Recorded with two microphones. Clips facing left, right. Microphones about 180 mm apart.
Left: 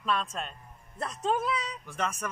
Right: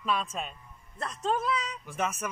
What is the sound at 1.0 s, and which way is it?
Speech, 20° left (ahead or behind).